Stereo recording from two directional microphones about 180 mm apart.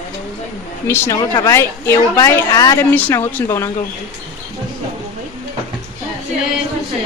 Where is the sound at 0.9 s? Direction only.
20° left (ahead or behind).